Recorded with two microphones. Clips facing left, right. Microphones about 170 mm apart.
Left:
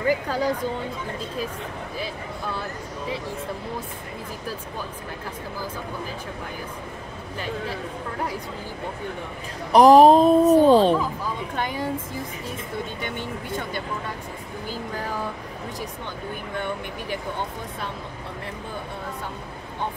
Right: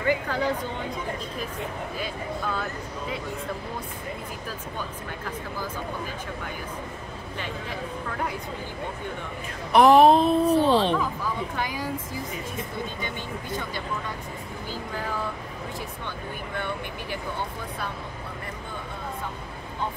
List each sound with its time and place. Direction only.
0.0 s speech: 35° left (ahead or behind)
9.7 s speech: 35° left (ahead or behind)